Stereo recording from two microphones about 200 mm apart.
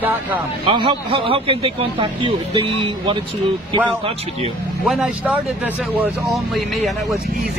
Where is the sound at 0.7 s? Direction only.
25° right (ahead or behind).